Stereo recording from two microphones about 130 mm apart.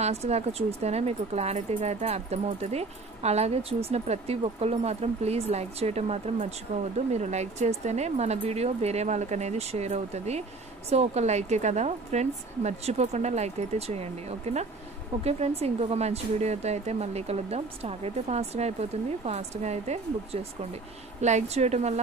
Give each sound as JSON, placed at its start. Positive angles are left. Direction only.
{"t": 0.0, "sound": "speech", "side_deg": -55}
{"t": 21.2, "sound": "speech", "side_deg": -60}